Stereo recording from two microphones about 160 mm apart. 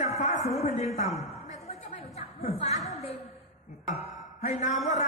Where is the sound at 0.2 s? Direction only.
45° left (ahead or behind).